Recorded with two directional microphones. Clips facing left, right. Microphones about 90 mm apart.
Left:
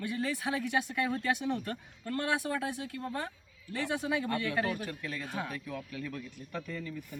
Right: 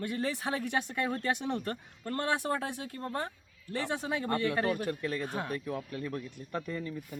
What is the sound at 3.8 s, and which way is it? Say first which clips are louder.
A man's voice: left 2 dB; 55° right (ahead or behind).